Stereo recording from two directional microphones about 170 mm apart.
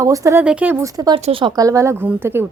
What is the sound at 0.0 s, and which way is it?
A woman's voice, 20° right (ahead or behind).